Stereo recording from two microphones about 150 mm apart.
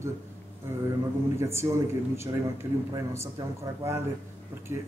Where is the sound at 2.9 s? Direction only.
20° right (ahead or behind).